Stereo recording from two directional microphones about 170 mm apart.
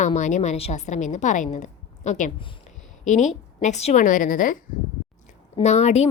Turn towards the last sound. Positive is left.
turn(degrees=40)  # may be behind; listen again after turning